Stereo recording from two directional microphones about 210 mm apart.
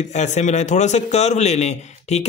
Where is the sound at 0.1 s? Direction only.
35° left (ahead or behind).